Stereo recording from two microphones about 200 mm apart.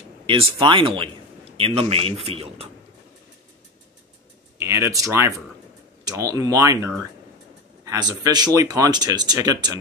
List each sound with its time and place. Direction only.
0.3 s a man's voice: 25° right (ahead or behind)
4.6 s a sound: 15° right (ahead or behind)
6.0 s a man's voice: 15° right (ahead or behind)